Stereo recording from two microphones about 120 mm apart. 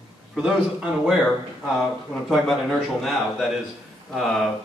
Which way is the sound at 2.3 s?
Centre (ahead or behind).